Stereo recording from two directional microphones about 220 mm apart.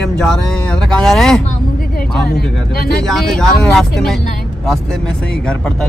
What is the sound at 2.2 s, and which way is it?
Speech, 45° left (ahead or behind).